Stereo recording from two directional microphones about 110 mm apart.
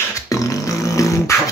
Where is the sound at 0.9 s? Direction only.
30° left (ahead or behind).